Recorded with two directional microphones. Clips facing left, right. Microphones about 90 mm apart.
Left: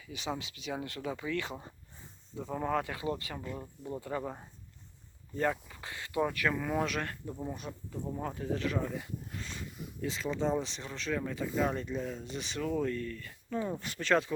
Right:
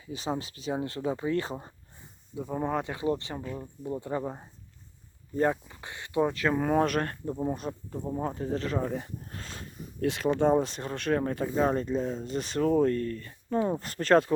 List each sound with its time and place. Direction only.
0.0 s speech: 35° right (ahead or behind)
2.3 s speech: 15° right (ahead or behind)
6.6 s speech: 45° right (ahead or behind)
8.1 s speech: 25° right (ahead or behind); by 11.4 s 50° right (ahead or behind)
11.4 s speech: 35° right (ahead or behind)